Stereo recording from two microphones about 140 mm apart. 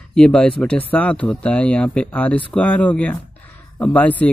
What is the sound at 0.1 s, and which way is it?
Speech, 5° left (ahead or behind).